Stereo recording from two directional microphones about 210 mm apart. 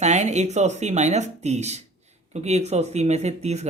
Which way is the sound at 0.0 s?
35° right (ahead or behind).